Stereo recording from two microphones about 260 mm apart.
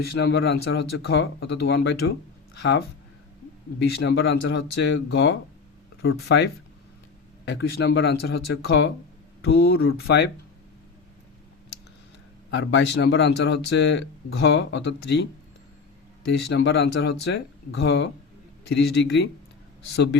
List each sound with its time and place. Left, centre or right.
0.0 s speech: left
12.5 s speech: left
16.3 s speech: left